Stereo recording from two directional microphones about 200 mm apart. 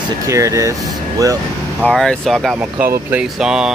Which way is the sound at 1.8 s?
5° left (ahead or behind).